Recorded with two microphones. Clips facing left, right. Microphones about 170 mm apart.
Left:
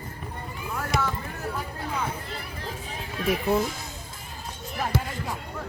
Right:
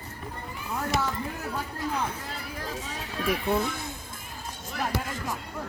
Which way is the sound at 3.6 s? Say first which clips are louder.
Left 1 dB; 55° right (ahead or behind).